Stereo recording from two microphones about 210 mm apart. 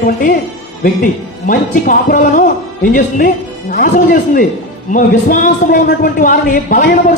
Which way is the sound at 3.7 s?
45° left (ahead or behind).